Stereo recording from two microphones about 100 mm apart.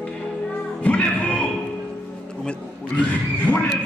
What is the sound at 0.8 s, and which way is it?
Music, 15° left (ahead or behind).